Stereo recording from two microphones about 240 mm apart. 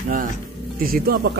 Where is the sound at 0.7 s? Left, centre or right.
Right.